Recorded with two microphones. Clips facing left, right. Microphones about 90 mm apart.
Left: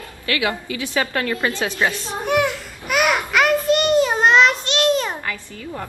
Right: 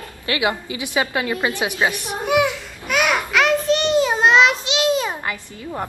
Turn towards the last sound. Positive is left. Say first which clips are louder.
# right 3 dB
turn(degrees=-25)  # may be behind; listen again after turning